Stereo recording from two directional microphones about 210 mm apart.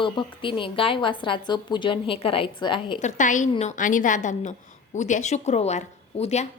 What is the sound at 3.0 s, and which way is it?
Speech, 35° left (ahead or behind).